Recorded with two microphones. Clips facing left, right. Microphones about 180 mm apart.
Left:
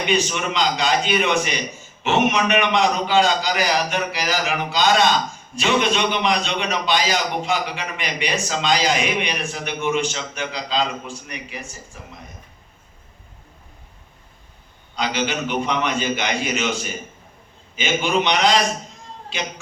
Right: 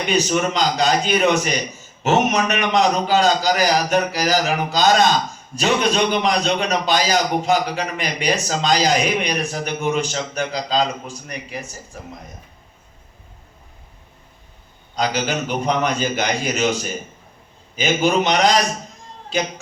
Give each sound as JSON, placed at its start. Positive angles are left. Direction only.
{"t": 0.0, "sound": "a man's voice", "side_deg": -40}
{"t": 14.9, "sound": "a man's voice", "side_deg": -40}